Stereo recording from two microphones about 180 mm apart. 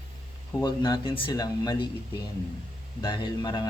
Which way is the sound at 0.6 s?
25° left (ahead or behind).